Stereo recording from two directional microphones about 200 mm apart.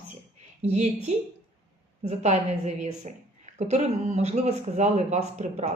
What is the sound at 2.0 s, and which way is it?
Speech, 35° right (ahead or behind).